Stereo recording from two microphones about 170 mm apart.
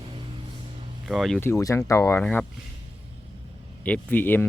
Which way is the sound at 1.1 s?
Centre (ahead or behind).